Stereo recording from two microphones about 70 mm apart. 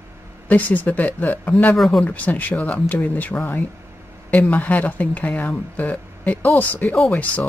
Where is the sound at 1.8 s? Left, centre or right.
Centre.